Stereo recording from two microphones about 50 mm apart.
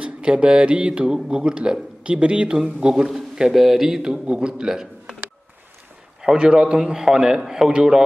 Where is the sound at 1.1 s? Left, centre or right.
Centre.